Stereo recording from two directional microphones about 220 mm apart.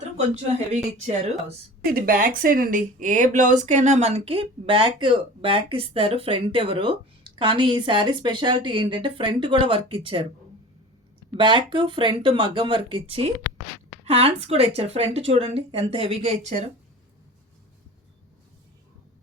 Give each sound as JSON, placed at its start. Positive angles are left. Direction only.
{"t": 0.7, "sound": "speech", "side_deg": -30}
{"t": 1.8, "sound": "speech", "side_deg": -40}
{"t": 11.3, "sound": "speech", "side_deg": -20}